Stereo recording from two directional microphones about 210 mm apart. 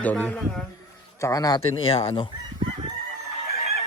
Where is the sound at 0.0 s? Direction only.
5° left (ahead or behind).